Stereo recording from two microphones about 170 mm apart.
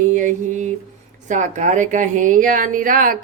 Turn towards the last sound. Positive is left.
turn(degrees=-55)  # may be behind; listen again after turning